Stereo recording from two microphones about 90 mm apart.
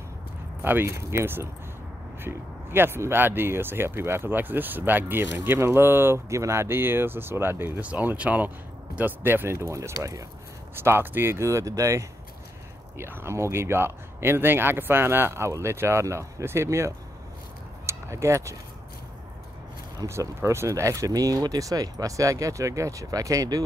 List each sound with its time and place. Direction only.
0.6 s speech: 25° right (ahead or behind)
10.8 s speech: 25° right (ahead or behind)
20.1 s speech: 30° right (ahead or behind)